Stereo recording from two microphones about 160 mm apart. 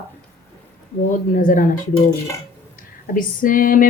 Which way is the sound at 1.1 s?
60° left (ahead or behind).